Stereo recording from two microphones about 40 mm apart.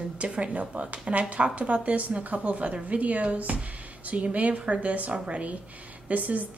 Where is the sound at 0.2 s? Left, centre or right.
Right.